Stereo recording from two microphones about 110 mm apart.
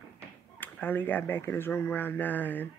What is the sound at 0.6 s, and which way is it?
Speech, 15° left (ahead or behind).